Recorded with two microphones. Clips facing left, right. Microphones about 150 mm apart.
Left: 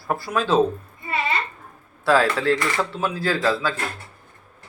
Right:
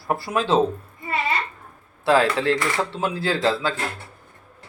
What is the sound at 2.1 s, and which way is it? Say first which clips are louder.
Speech: even; 20° right (ahead or behind).